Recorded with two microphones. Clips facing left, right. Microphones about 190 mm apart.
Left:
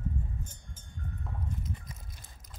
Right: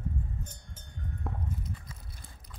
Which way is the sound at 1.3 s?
65° right (ahead or behind).